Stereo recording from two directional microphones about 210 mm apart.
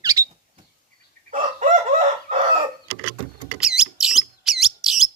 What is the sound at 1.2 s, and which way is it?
Chicken, 35° right (ahead or behind).